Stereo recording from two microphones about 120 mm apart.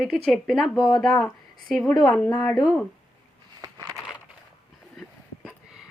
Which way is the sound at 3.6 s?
30° right (ahead or behind).